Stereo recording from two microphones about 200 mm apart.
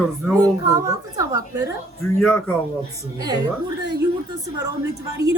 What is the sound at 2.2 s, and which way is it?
Speech, 5° left (ahead or behind).